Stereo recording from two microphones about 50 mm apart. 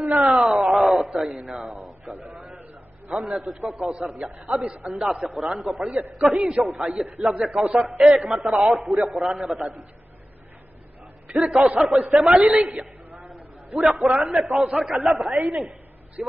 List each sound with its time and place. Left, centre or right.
0.0 s a sound: centre
1.5 s a man's voice: centre
2.1 s a man's voice: right
3.1 s a man's voice: centre
11.3 s a man's voice: centre
13.3 s a sound: centre
14.8 s a man's voice: centre